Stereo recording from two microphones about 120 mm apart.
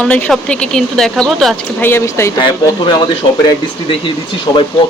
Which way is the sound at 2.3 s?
40° left (ahead or behind).